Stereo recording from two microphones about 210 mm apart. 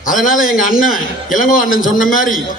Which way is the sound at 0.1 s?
40° left (ahead or behind).